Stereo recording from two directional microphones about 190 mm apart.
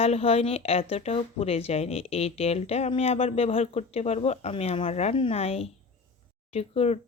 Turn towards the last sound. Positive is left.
turn(degrees=35)  # may be behind; listen again after turning